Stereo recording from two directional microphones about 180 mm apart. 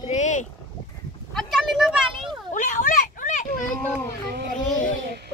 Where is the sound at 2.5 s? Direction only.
45° left (ahead or behind).